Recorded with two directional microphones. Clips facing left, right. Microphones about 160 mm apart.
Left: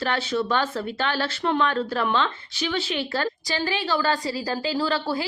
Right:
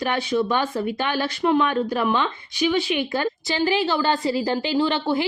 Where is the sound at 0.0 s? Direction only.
15° right (ahead or behind).